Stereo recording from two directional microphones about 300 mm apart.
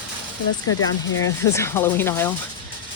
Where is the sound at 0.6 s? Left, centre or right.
Left.